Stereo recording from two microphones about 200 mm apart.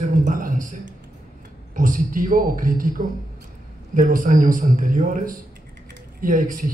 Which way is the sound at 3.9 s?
40° right (ahead or behind).